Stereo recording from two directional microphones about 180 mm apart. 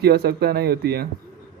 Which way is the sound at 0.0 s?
60° right (ahead or behind).